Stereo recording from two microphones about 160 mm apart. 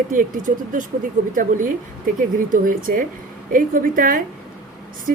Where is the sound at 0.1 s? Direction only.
55° right (ahead or behind).